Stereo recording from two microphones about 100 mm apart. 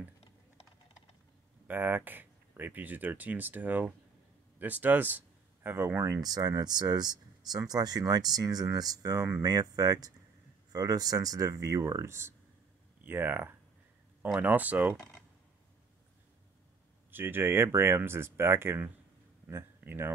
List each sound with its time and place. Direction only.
1.7 s speech: 20° right (ahead or behind)
6.2 s speech: 40° right (ahead or behind); by 15.0 s 15° right (ahead or behind)
17.1 s speech: 20° right (ahead or behind)